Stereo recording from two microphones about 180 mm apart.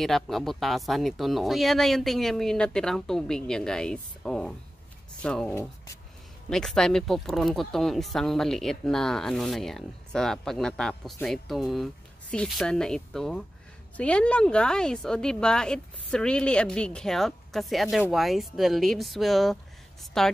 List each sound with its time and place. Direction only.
0.0 s speech: centre (ahead or behind)